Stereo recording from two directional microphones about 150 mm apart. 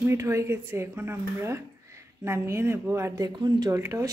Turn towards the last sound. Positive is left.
turn(degrees=-20)  # may be behind; listen again after turning